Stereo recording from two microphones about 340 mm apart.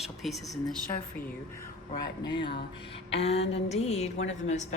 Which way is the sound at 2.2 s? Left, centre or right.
Centre.